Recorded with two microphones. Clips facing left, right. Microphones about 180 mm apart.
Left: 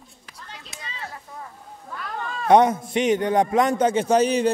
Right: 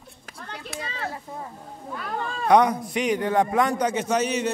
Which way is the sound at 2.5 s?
25° left (ahead or behind).